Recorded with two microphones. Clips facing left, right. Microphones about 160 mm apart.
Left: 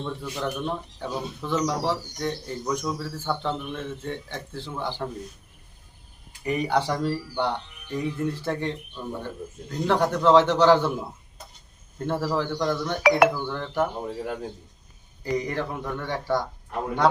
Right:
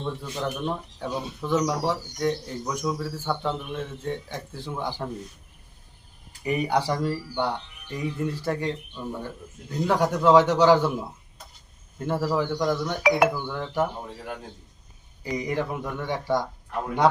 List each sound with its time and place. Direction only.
0.0 s speech: 10° right (ahead or behind)
6.4 s speech: 10° right (ahead or behind)
11.9 s speech: 5° right (ahead or behind)
13.0 s speech: 70° left (ahead or behind)
13.2 s speech: 10° right (ahead or behind)
15.2 s speech: 15° right (ahead or behind)